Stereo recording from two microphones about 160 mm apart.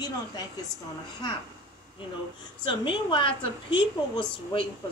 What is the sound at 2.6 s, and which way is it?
A woman's voice, 30° left (ahead or behind).